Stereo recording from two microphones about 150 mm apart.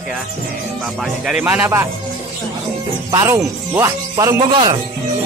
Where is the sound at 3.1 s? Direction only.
20° right (ahead or behind).